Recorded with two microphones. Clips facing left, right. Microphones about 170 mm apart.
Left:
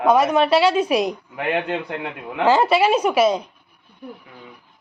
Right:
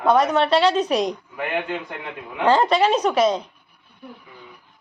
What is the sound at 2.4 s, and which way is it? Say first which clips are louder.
A woman's voice: left 1 dB; 5° left (ahead or behind).